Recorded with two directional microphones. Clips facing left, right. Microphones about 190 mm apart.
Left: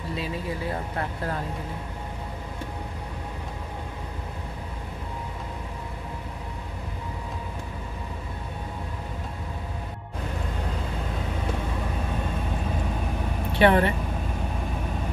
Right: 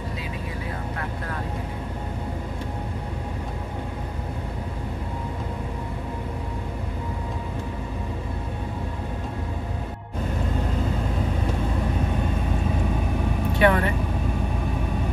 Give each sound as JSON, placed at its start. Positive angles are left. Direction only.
{"t": 13.6, "sound": "vehicle", "side_deg": 30}